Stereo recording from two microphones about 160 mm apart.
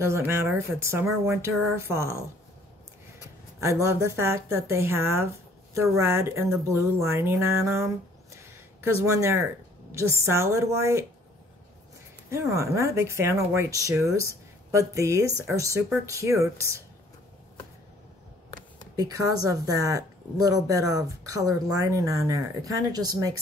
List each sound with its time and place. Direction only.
0.3 s speech: 15° right (ahead or behind)
1.5 s speech: centre (ahead or behind)
1.8 s speech: 15° right (ahead or behind)
3.6 s speech: 15° right (ahead or behind)
12.3 s a woman's voice: 15° right (ahead or behind)
18.9 s a woman's voice: 25° right (ahead or behind)